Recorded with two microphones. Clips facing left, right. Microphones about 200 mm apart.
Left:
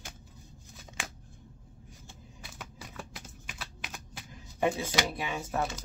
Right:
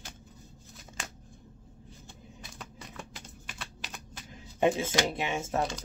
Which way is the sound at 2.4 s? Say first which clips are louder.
Left 1 dB; 5° left (ahead or behind).